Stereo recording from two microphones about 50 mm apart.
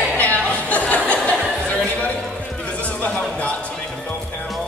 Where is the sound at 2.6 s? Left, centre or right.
Left.